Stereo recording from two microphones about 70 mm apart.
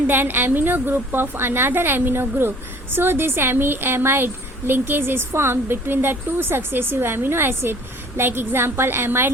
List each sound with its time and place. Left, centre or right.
0.1 s a woman's voice: right